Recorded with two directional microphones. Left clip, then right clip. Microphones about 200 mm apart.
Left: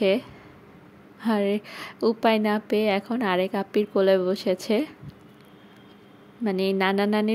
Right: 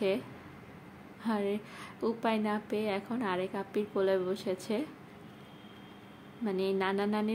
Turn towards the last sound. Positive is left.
turn(degrees=45)  # may be behind; listen again after turning